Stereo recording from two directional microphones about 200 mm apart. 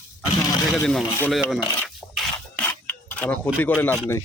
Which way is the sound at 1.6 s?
15° left (ahead or behind).